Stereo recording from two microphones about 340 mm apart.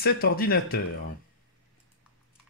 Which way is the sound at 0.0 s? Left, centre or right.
Left.